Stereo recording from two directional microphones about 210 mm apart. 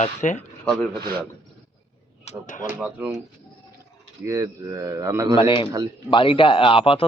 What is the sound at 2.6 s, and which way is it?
Speech, 10° right (ahead or behind).